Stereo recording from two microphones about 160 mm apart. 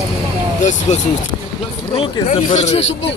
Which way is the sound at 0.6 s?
50° left (ahead or behind).